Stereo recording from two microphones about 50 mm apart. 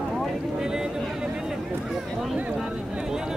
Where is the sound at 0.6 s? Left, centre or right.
Centre.